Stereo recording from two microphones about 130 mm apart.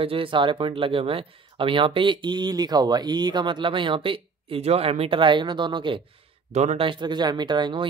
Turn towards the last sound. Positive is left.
turn(degrees=-35)  # may be behind; listen again after turning